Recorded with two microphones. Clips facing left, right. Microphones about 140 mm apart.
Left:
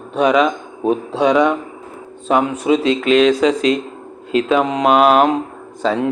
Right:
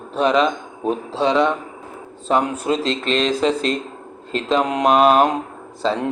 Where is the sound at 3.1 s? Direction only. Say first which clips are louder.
Left 6 dB; 35° right (ahead or behind).